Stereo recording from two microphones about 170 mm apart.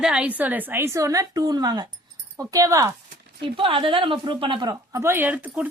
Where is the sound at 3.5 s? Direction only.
30° right (ahead or behind); by 5.7 s 10° right (ahead or behind).